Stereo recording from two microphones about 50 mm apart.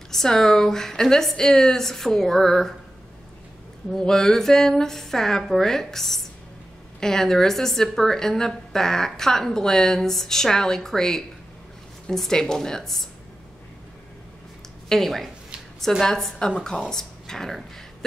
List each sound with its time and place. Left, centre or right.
0.1 s a woman's voice: centre
4.0 s a woman's voice: centre
14.9 s a woman's voice: centre